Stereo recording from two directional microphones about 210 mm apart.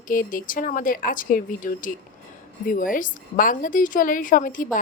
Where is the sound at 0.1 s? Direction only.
40° left (ahead or behind).